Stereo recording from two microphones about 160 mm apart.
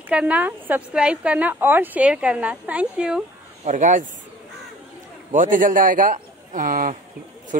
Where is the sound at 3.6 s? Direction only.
50° right (ahead or behind).